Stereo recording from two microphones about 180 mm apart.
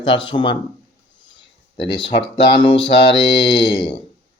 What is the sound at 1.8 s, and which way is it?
Speech, 30° left (ahead or behind).